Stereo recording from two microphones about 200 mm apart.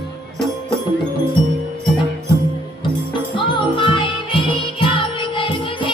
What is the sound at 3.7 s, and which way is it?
Music, 25° left (ahead or behind).